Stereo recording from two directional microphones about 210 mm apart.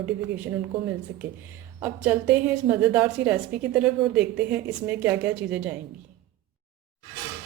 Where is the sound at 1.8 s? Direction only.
10° right (ahead or behind).